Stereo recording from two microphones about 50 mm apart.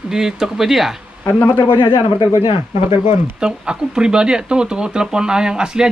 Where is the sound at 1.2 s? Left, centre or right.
Left.